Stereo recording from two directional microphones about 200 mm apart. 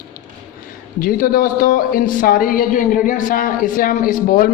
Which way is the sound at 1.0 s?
45° left (ahead or behind).